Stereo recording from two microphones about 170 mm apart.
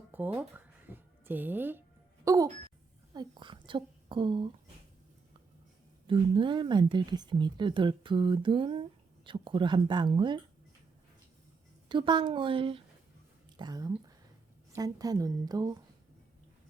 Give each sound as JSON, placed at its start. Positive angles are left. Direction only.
{"t": 0.3, "sound": "a woman's voice", "side_deg": -10}
{"t": 6.1, "sound": "speech", "side_deg": -30}
{"t": 11.9, "sound": "speech", "side_deg": -25}